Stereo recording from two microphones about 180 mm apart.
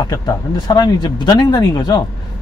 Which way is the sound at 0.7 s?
25° left (ahead or behind).